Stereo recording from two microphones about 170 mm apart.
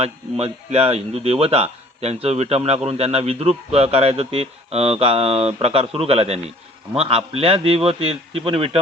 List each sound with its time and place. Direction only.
0.0 s a man's voice: 40° right (ahead or behind)